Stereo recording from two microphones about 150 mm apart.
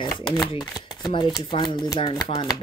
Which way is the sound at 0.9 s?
30° left (ahead or behind).